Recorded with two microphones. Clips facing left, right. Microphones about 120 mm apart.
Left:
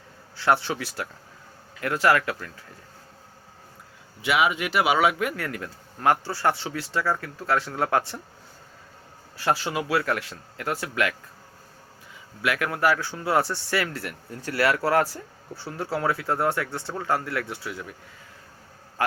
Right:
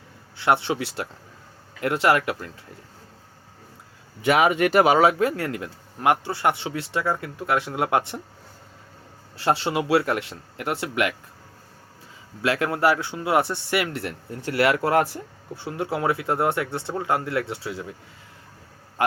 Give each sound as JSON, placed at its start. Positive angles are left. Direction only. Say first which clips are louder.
{"t": 0.3, "sound": "speech", "louder": "right 1 dB", "side_deg": -20}
{"t": 4.2, "sound": "speech", "louder": "right 5 dB", "side_deg": -45}
{"t": 9.4, "sound": "speech", "louder": "right 3 dB", "side_deg": -25}
{"t": 12.4, "sound": "speech", "louder": "right 3 dB", "side_deg": -25}
{"t": 19.0, "sound": "a man's voice", "louder": "right 3 dB", "side_deg": -20}